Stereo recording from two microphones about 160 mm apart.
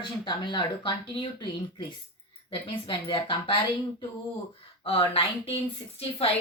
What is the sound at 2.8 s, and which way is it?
Speech, 30° left (ahead or behind).